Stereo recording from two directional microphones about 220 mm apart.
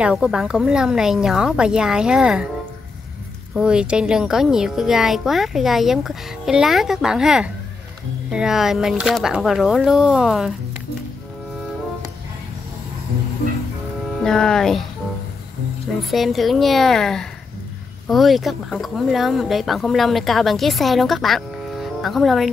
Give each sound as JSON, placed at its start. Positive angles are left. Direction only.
{"t": 0.0, "sound": "speech", "side_deg": -5}
{"t": 3.5, "sound": "speech", "side_deg": -5}
{"t": 14.0, "sound": "speech", "side_deg": 0}
{"t": 16.1, "sound": "speech", "side_deg": 0}